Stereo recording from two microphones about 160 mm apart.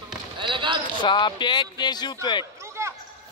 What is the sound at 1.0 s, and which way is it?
Speech, 30° left (ahead or behind).